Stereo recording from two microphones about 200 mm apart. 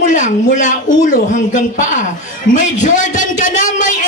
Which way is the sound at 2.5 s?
40° left (ahead or behind).